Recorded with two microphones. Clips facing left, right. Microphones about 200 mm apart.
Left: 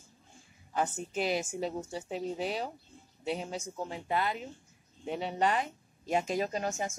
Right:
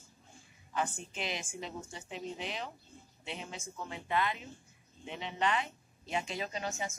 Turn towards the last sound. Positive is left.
turn(degrees=45)  # may be behind; listen again after turning